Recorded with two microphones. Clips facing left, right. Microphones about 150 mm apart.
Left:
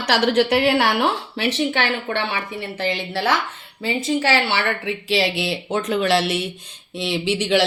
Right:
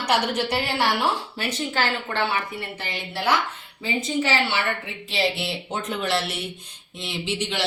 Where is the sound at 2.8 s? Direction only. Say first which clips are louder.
Left 5 dB; 90° left.